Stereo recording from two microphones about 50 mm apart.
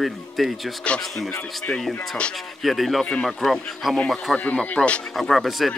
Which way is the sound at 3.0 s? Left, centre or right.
Centre.